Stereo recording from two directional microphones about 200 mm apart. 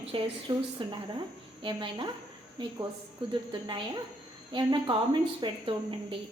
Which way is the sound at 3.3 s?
20° right (ahead or behind).